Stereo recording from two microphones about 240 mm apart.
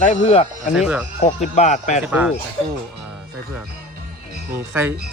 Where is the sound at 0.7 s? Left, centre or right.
Centre.